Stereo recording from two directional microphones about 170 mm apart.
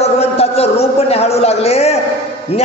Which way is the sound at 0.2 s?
35° left (ahead or behind).